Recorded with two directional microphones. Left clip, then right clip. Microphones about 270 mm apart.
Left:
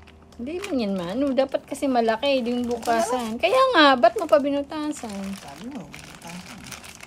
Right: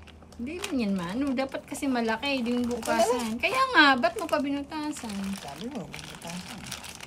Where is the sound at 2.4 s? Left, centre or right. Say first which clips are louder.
Left 4 dB; centre.